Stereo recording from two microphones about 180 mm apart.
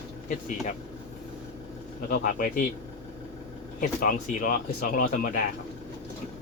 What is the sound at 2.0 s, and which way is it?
Speech, 55° left (ahead or behind).